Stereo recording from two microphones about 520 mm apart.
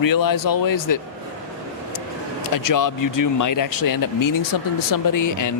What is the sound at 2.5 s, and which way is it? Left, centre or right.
Speech, left.